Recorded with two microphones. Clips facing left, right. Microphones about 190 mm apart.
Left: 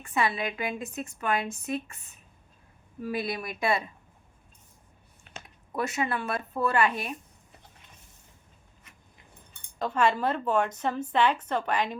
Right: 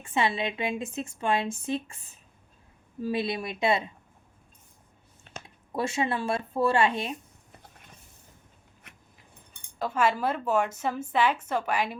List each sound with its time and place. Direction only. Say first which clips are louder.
0.0 s speech: right 1 dB; 25° right (ahead or behind)
5.7 s speech: right 1 dB; 25° right (ahead or behind)
8.9 s dog: right 4 dB; 70° right (ahead or behind)
9.7 s a woman's voice: left 1 dB; 5° right (ahead or behind)